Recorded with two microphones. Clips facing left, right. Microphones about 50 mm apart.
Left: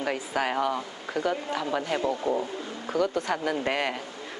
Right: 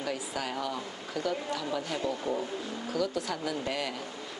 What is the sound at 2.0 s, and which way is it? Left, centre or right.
Speech, left.